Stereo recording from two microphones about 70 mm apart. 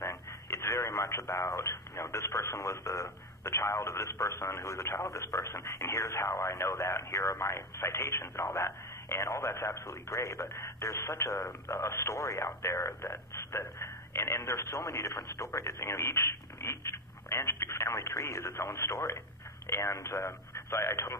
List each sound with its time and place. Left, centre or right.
0.0 s speech: left